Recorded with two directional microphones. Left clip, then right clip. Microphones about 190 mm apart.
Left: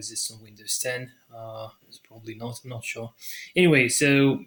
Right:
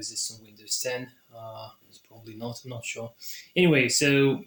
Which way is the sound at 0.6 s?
40° left (ahead or behind).